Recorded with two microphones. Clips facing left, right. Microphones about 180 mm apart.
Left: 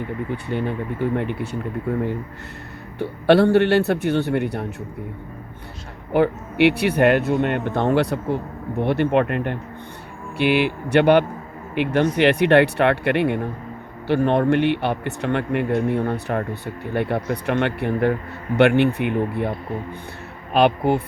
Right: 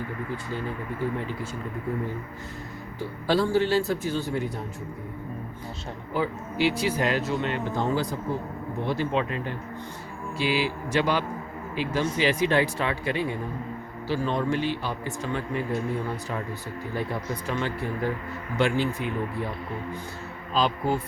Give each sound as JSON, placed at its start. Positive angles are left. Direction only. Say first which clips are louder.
{"t": 0.3, "sound": "speech", "louder": "left 7 dB", "side_deg": 65}
{"t": 3.0, "sound": "a man's voice", "louder": "left 9 dB", "side_deg": 65}
{"t": 6.1, "sound": "a man's voice", "louder": "left 9 dB", "side_deg": 65}